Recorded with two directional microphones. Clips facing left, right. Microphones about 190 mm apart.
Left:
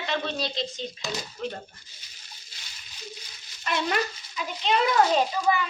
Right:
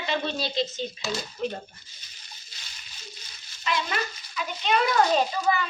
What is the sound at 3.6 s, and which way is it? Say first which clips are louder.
Speech: left 1 dB; 50° left (ahead or behind).